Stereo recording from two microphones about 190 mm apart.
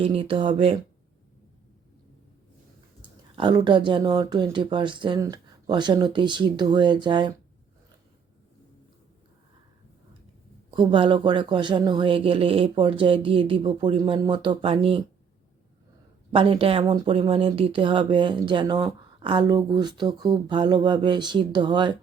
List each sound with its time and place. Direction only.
0.0 s speech: 30° right (ahead or behind)
3.3 s speech: 25° right (ahead or behind)
10.7 s speech: 25° right (ahead or behind)
16.3 s speech: 30° right (ahead or behind)